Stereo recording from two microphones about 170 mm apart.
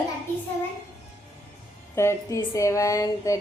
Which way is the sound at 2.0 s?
15° left (ahead or behind).